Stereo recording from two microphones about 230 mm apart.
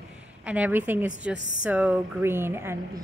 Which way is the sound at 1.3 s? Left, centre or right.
Left.